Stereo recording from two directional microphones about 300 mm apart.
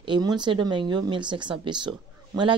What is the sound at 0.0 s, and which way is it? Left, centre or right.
Speech, centre.